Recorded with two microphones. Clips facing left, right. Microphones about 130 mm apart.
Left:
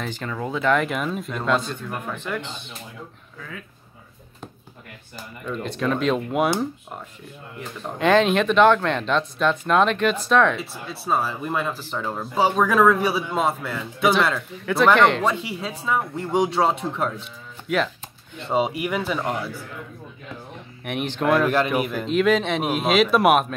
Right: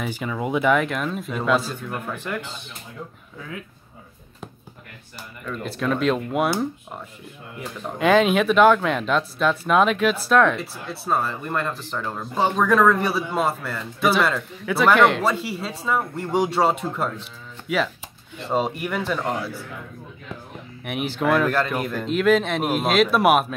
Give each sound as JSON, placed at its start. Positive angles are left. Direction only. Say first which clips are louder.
{"t": 0.0, "sound": "speech", "louder": "right 2 dB", "side_deg": -10}
{"t": 0.7, "sound": "speech", "louder": "even", "side_deg": 0}
{"t": 5.5, "sound": "speech", "louder": "even", "side_deg": 0}
{"t": 20.8, "sound": "speech", "louder": "even", "side_deg": -5}